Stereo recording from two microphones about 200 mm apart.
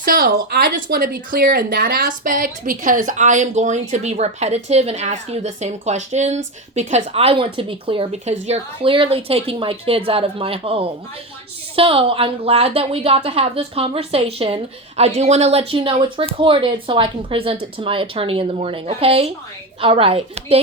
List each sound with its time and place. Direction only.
0.0 s a woman's voice: 45° right (ahead or behind); by 20.6 s 30° right (ahead or behind)